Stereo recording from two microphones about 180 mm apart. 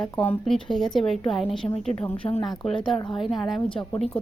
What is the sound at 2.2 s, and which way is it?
Speech, 20° left (ahead or behind).